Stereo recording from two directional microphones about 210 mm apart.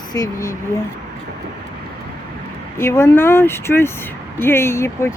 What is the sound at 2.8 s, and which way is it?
Speech, 10° left (ahead or behind).